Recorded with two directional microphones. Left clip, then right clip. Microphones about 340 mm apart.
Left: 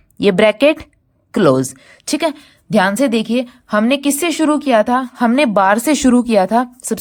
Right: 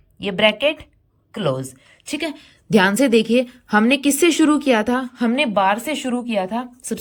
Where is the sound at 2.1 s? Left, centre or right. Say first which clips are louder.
Left 8 dB; centre.